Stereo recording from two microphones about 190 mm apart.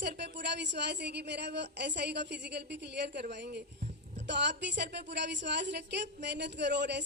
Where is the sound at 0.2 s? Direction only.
65° right (ahead or behind).